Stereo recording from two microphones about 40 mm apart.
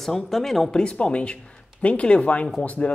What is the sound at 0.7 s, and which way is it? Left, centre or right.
A man's voice, left.